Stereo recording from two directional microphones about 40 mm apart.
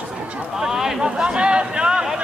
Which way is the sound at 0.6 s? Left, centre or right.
Centre.